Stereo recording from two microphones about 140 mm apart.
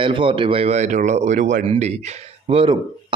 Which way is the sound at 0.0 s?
35° right (ahead or behind).